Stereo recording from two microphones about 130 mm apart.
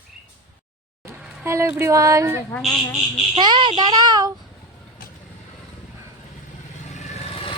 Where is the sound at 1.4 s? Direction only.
20° right (ahead or behind).